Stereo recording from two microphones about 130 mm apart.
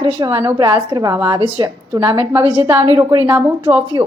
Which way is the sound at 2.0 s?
20° right (ahead or behind).